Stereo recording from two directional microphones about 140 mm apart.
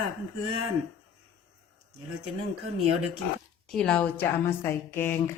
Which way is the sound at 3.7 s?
5° left (ahead or behind).